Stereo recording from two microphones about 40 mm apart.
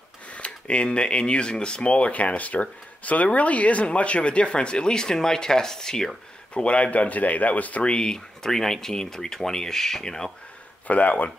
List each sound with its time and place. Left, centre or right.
0.3 s speech: left
6.5 s speech: left
7.8 s speech: left
10.9 s speech: left